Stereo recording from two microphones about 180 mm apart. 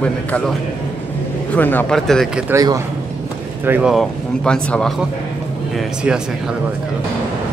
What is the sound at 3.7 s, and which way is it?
Speech, 5° right (ahead or behind).